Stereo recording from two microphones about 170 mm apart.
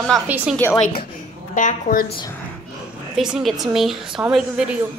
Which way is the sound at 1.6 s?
50° left (ahead or behind).